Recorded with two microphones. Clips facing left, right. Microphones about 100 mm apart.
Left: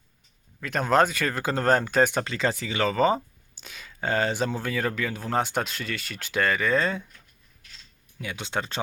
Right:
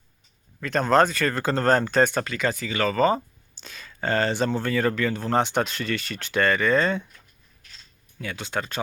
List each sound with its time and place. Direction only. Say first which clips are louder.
0.6 s speech: right 2 dB; 5° left (ahead or behind)
2.2 s speech: right 1 dB; 25° left (ahead or behind); by 7.0 s 5° left (ahead or behind)
8.2 s speech: right 1 dB; 15° left (ahead or behind)